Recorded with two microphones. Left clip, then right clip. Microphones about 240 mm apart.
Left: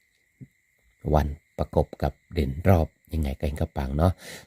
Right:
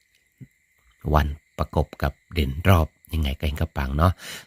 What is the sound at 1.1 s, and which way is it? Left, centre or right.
Speech, centre.